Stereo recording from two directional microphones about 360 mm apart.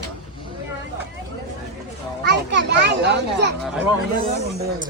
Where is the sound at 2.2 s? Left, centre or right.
Right.